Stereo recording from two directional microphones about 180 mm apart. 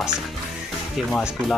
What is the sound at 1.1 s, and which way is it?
Speech, centre (ahead or behind).